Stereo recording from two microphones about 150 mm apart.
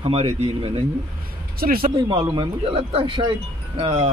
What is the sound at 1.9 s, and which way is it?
Speech, 30° right (ahead or behind).